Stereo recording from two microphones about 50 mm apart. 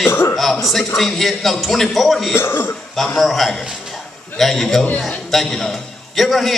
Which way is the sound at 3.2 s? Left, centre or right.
Centre.